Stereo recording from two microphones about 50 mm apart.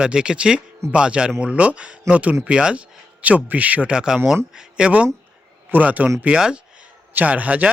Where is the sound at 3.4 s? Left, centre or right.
Right.